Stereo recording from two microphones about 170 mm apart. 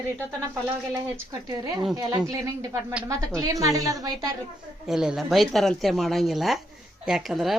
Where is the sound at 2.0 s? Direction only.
20° right (ahead or behind).